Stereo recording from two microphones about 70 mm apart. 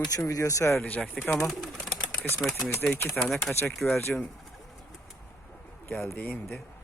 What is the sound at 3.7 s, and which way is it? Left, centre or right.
Speech, centre.